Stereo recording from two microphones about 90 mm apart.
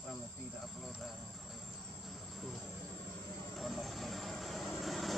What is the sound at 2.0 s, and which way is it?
Vehicle, centre (ahead or behind).